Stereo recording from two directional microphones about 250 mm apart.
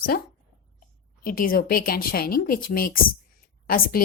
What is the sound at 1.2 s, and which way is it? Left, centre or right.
A woman's voice, left.